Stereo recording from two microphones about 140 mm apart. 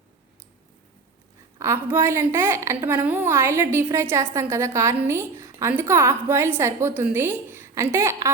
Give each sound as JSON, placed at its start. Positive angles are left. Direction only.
{"t": 1.5, "sound": "a woman's voice", "side_deg": -20}